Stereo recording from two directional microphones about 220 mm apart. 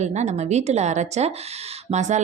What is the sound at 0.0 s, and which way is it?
Speech, 30° right (ahead or behind).